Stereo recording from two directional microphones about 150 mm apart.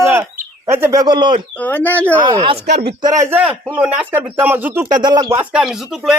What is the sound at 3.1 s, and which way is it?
Speech, 10° right (ahead or behind).